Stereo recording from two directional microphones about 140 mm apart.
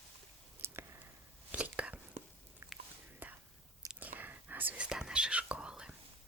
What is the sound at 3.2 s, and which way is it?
Whispering, 10° right (ahead or behind).